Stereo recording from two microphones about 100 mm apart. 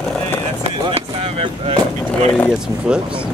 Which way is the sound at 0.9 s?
85° right.